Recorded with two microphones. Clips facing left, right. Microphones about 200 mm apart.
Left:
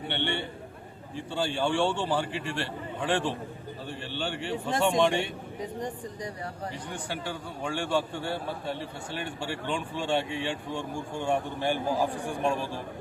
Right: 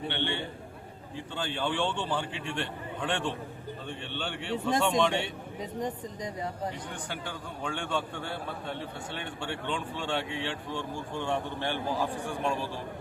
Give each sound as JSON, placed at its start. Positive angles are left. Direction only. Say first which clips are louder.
{"t": 1.3, "sound": "a man's voice", "louder": "left 4 dB", "side_deg": 10}
{"t": 5.8, "sound": "speech", "louder": "right 1 dB", "side_deg": -20}
{"t": 7.6, "sound": "a man's voice", "louder": "left 4 dB", "side_deg": 10}